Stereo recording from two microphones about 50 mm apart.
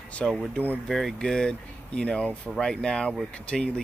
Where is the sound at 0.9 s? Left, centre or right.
Centre.